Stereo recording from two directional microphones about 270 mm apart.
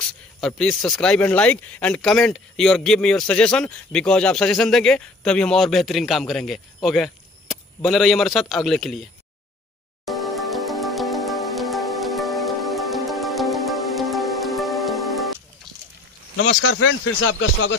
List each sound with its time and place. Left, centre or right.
0.4 s speech: centre
10.0 s music: centre
16.4 s speech: left